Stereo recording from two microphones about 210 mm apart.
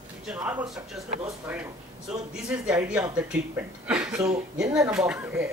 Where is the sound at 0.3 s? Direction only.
5° right (ahead or behind).